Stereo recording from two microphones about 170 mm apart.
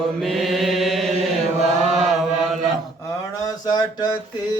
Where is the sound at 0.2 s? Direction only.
Centre (ahead or behind).